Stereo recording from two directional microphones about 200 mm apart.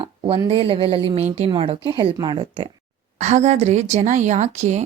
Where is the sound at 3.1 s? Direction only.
35° right (ahead or behind).